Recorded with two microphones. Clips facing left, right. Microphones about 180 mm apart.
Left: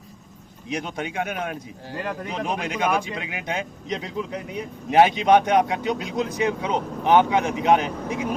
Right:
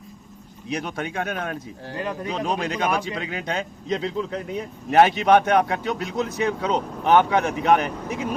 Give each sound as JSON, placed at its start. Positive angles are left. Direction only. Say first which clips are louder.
{"t": 0.7, "sound": "speech", "louder": "right 1 dB", "side_deg": 20}